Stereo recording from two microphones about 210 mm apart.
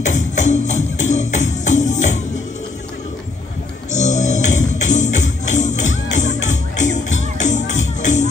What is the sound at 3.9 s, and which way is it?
Music, 35° left (ahead or behind).